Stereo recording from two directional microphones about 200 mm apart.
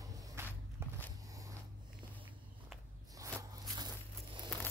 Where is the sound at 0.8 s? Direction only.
10° right (ahead or behind).